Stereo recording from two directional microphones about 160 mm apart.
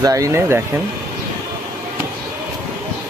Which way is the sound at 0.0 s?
20° right (ahead or behind).